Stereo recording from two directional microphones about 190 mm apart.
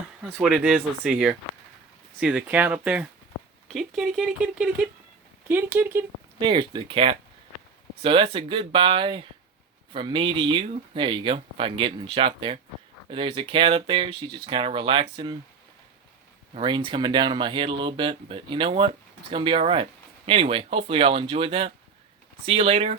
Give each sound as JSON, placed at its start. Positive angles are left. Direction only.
{"t": 0.2, "sound": "speech", "side_deg": -10}
{"t": 6.4, "sound": "speech", "side_deg": -25}
{"t": 16.6, "sound": "speech", "side_deg": -25}